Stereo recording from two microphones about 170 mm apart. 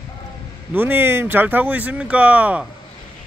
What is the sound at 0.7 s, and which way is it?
Speech, 10° right (ahead or behind).